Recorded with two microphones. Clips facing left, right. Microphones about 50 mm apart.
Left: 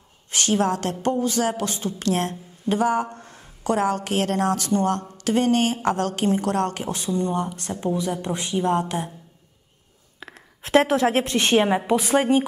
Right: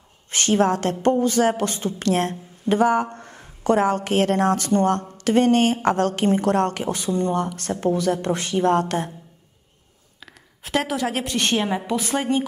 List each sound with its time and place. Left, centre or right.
0.3 s a woman's voice: right
7.4 s speech: right
10.2 s a sound: left
11.2 s a woman's voice: centre